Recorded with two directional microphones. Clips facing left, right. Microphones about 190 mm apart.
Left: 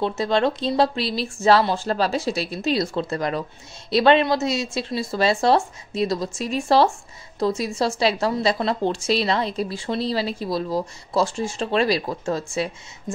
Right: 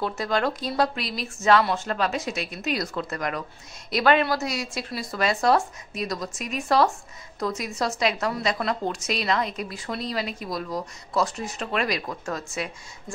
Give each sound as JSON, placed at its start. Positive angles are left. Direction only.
{"t": 0.0, "sound": "a woman's voice", "side_deg": 25}